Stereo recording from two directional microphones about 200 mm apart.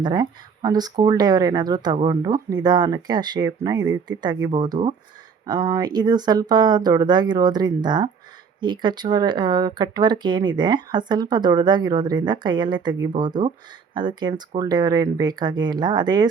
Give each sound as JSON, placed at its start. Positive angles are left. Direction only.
{"t": 0.0, "sound": "speech", "side_deg": -20}